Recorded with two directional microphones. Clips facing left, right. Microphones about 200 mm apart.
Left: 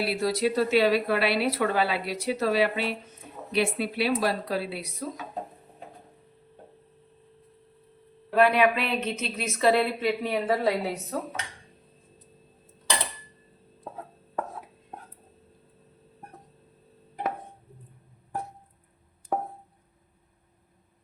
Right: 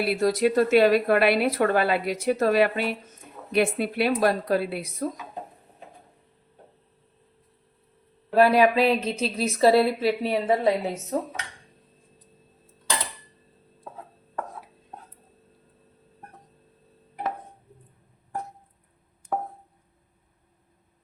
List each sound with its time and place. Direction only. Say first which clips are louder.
0.0 s a woman's voice: right 4 dB; 50° right (ahead or behind)
8.4 s a woman's voice: right 3 dB; 35° right (ahead or behind)